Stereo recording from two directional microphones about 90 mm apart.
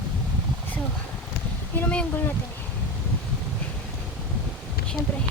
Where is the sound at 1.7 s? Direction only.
20° left (ahead or behind).